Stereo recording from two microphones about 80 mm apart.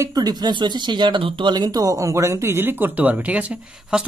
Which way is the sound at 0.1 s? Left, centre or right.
Right.